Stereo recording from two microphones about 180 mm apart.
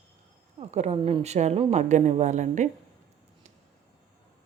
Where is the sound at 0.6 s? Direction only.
40° right (ahead or behind).